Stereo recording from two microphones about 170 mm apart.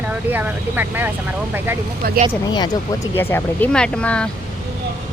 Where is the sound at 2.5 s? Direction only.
25° left (ahead or behind).